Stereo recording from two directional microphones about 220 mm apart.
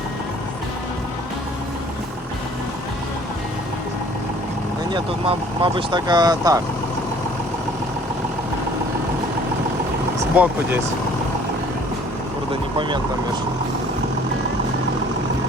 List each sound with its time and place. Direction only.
4.9 s speech: 25° right (ahead or behind)
10.3 s speech: 5° right (ahead or behind)